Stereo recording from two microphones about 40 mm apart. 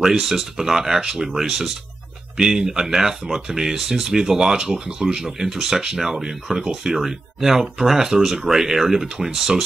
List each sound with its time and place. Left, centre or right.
0.0 s speech: centre